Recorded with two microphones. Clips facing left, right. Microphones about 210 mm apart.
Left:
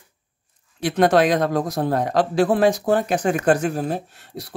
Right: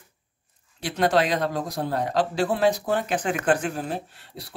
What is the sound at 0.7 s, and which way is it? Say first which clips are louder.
Speech: left 5 dB; 50° left (ahead or behind).